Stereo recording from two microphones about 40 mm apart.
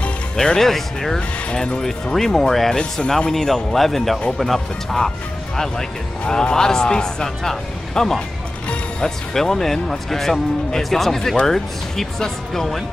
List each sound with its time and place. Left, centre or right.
0.6 s speech: centre